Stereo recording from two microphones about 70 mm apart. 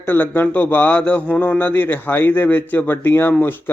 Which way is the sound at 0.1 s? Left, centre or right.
Left.